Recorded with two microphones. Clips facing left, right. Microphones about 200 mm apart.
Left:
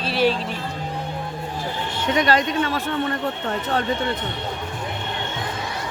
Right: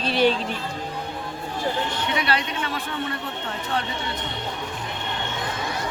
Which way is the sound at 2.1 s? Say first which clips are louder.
Left 10 dB; 45° left (ahead or behind).